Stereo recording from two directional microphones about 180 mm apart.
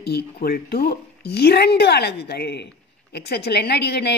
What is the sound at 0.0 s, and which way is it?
A woman's voice, 60° left (ahead or behind).